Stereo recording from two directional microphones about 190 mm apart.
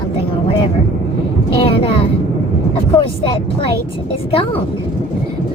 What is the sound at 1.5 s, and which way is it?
Vehicle, 30° left (ahead or behind).